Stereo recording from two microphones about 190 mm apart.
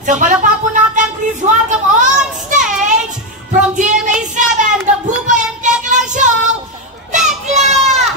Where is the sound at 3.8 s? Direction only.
40° right (ahead or behind).